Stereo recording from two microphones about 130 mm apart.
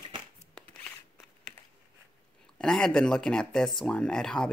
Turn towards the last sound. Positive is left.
turn(degrees=5)  # may be behind; listen again after turning